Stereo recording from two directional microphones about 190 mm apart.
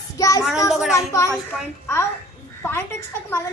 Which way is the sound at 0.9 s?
15° left (ahead or behind).